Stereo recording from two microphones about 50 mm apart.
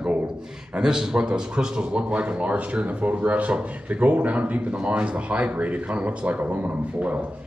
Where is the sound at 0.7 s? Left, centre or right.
Centre.